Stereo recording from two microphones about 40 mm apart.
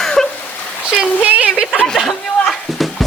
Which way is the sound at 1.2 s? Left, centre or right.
Right.